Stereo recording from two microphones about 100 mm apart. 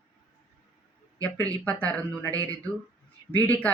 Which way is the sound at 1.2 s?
15° left (ahead or behind).